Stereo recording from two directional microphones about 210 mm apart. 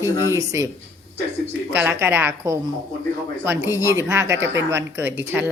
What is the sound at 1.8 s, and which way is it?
Speech, 10° right (ahead or behind).